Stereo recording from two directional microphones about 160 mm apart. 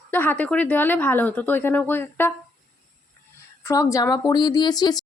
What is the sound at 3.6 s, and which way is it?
Speech, 20° left (ahead or behind).